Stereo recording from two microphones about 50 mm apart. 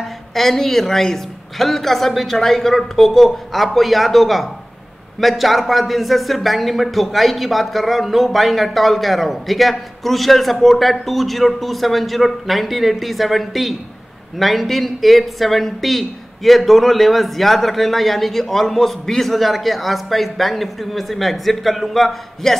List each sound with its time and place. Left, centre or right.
0.3 s speech: centre